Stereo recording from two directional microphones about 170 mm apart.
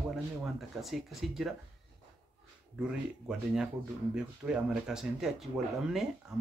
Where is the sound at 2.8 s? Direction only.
5° right (ahead or behind).